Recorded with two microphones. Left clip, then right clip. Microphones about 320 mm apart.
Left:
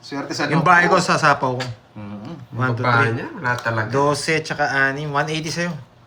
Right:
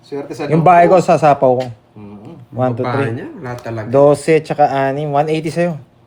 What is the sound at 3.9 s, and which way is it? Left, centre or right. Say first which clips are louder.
Speech: right 11 dB; centre.